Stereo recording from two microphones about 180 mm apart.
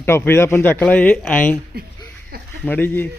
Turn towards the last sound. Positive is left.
turn(degrees=10)  # may be behind; listen again after turning